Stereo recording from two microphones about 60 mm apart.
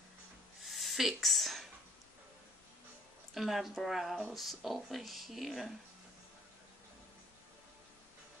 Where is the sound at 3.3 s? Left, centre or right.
Centre.